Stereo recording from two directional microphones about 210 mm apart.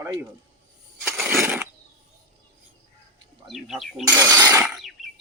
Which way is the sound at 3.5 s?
Centre (ahead or behind).